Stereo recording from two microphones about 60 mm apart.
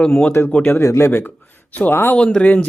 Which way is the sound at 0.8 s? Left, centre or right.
Left.